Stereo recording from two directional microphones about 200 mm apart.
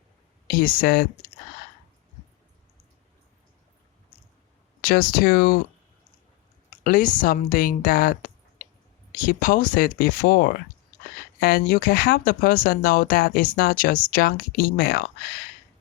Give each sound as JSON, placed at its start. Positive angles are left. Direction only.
{"t": 0.4, "sound": "speech", "side_deg": 45}
{"t": 4.8, "sound": "speech", "side_deg": 45}
{"t": 6.7, "sound": "a woman's voice", "side_deg": 45}